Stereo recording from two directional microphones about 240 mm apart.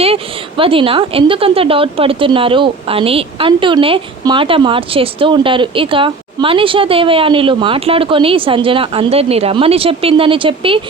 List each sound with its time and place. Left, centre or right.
0.0 s speech: right